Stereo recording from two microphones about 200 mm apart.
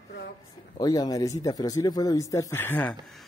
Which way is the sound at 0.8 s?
20° left (ahead or behind).